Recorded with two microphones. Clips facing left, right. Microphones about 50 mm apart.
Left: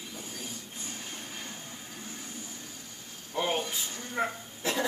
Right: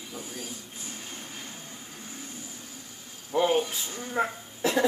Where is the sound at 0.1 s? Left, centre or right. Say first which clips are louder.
Right 5 dB; centre.